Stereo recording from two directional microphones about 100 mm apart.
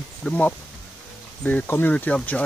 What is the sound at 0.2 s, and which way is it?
Speech, 15° left (ahead or behind).